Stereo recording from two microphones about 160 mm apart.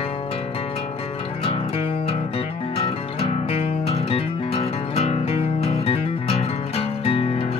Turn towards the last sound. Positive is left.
turn(degrees=40)  # may be behind; listen again after turning